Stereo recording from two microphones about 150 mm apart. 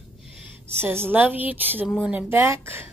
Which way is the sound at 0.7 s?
15° right (ahead or behind).